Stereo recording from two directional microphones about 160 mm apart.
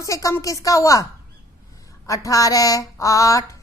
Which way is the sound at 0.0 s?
20° left (ahead or behind).